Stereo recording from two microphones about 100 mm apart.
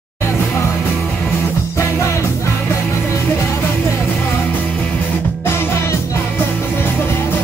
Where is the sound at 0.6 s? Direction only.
30° left (ahead or behind).